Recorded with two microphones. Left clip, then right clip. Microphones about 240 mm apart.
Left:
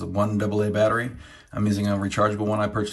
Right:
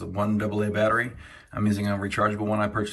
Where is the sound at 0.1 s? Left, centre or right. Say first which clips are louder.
Left 3 dB; centre.